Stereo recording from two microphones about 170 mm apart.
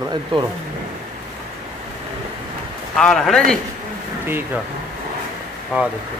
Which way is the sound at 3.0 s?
5° left (ahead or behind).